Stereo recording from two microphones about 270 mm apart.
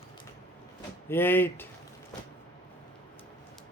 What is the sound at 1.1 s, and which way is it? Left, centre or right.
Speech, centre.